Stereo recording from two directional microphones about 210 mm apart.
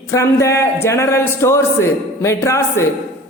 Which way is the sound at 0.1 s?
15° left (ahead or behind).